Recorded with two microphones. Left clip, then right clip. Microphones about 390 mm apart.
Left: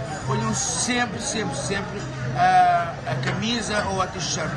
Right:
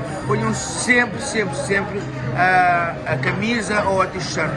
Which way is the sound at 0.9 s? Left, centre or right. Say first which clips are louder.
Right 12 dB; centre.